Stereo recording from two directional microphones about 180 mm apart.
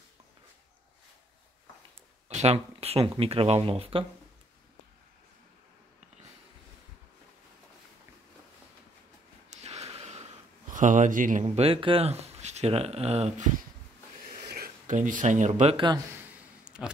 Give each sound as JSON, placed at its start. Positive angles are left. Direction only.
{"t": 2.2, "sound": "speech", "side_deg": -35}
{"t": 9.5, "sound": "a sound", "side_deg": -35}
{"t": 10.7, "sound": "speech", "side_deg": -45}
{"t": 11.4, "sound": "speech", "side_deg": -30}
{"t": 14.5, "sound": "speech", "side_deg": -50}
{"t": 15.7, "sound": "speech", "side_deg": -25}
{"t": 16.6, "sound": "a sound", "side_deg": -5}